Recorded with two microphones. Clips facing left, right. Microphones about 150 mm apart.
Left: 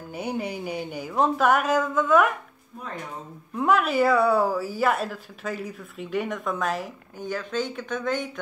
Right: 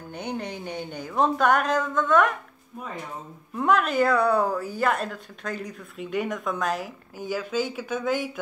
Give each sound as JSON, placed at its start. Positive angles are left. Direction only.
{"t": 0.1, "sound": "speech", "side_deg": 5}
{"t": 3.5, "sound": "a woman's voice", "side_deg": 5}